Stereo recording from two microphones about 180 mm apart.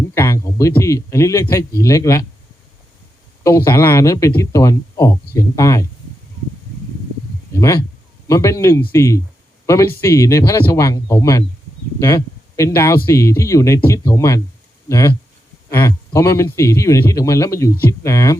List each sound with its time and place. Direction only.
0.1 s a sound: 15° left (ahead or behind)
0.8 s speech: 15° left (ahead or behind)
3.4 s speech: 15° left (ahead or behind)
7.5 s speech: 15° left (ahead or behind)